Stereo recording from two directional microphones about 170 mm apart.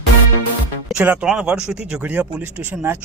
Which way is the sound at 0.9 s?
5° right (ahead or behind).